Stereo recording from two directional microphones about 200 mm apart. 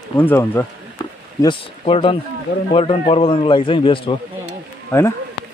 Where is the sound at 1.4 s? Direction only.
25° left (ahead or behind).